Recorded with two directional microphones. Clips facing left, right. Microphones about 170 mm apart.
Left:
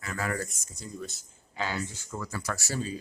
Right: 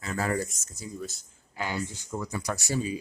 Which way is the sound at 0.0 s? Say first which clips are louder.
Right 3 dB; 30° right (ahead or behind).